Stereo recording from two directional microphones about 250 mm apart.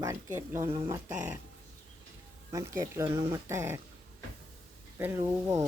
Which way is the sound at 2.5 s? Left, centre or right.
Centre.